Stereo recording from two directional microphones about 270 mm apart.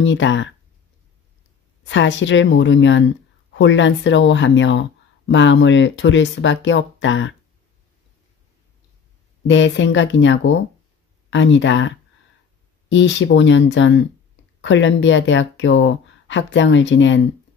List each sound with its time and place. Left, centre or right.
0.0 s speech: left
1.9 s speech: left
9.5 s speech: left